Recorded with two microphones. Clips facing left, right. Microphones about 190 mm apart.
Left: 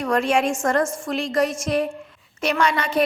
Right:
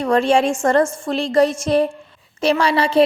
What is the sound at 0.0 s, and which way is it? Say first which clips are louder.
A woman's voice: right 5 dB; 30° right (ahead or behind).